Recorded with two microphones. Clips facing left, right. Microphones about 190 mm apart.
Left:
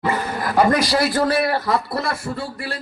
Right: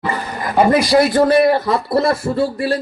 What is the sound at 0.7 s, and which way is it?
Speech, 10° right (ahead or behind).